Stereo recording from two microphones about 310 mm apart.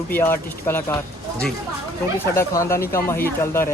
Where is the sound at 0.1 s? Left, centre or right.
Centre.